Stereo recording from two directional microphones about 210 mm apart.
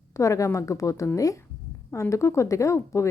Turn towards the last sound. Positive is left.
turn(degrees=15)  # may be behind; listen again after turning